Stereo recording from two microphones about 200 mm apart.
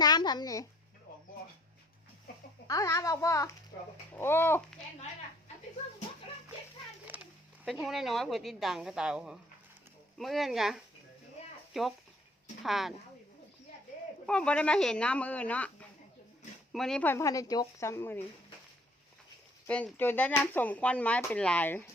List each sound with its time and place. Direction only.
0.0 s a sound: 20° left (ahead or behind)
2.6 s speech: 15° left (ahead or behind)
7.6 s a woman's voice: centre (ahead or behind)
14.3 s a woman's voice: 5° left (ahead or behind)
19.6 s speech: 5° left (ahead or behind)